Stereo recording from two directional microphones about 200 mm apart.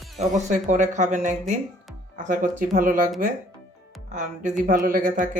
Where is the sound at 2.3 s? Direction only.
45° right (ahead or behind).